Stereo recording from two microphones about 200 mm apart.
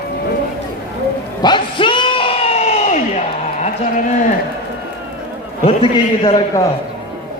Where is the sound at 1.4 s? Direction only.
25° left (ahead or behind).